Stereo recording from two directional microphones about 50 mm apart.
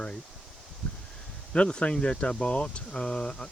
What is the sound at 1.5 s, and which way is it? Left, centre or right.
Speech, left.